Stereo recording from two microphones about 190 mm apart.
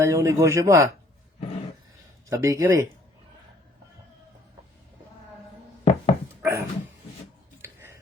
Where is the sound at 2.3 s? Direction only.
15° right (ahead or behind).